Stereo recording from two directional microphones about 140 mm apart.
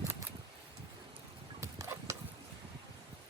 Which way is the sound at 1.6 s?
20° right (ahead or behind).